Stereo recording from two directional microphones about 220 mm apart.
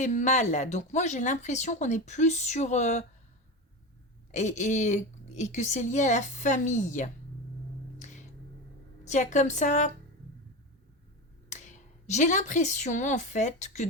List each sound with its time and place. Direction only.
0.0 s speech: 35° left (ahead or behind)
4.3 s speech: 35° left (ahead or behind)
7.9 s a sound: 35° left (ahead or behind)
9.0 s speech: 35° left (ahead or behind)
11.4 s speech: 35° left (ahead or behind)